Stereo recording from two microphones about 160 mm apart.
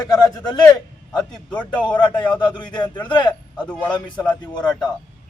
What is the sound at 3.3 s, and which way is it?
Speech, 10° left (ahead or behind).